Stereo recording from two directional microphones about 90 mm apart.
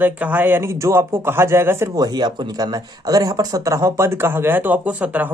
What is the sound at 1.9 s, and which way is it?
Speech, 50° right (ahead or behind).